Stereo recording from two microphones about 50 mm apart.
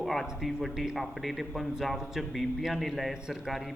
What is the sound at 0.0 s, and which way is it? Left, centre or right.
Speech, centre.